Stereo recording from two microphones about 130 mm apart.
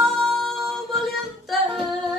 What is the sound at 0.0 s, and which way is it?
Music, 5° left (ahead or behind).